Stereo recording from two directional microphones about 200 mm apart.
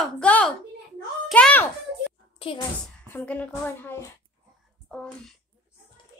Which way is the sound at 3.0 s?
10° left (ahead or behind).